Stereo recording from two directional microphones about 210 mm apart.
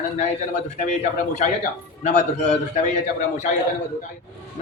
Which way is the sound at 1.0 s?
35° left (ahead or behind).